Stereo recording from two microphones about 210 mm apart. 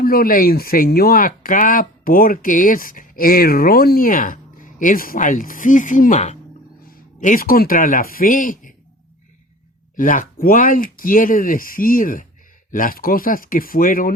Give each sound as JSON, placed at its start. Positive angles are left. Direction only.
{"t": 0.0, "sound": "speech", "side_deg": 45}
{"t": 9.9, "sound": "speech", "side_deg": 40}